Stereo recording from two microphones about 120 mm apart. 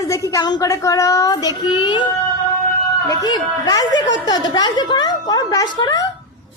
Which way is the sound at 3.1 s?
35° left (ahead or behind).